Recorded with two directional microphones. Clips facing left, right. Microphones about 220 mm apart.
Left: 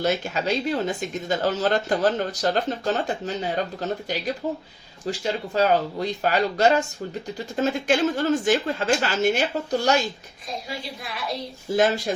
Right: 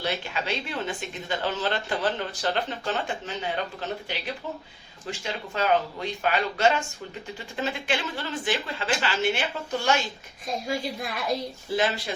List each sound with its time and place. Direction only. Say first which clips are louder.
0.0 s speech: left 6 dB; 45° left (ahead or behind)
10.7 s a woman's voice: right 4 dB; 50° right (ahead or behind)
11.8 s speech: left 7 dB; 45° left (ahead or behind)